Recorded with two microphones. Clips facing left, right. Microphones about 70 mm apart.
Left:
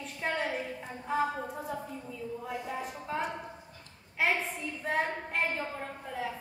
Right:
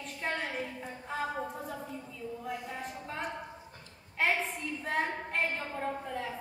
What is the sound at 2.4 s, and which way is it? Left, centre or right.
A woman's voice, centre.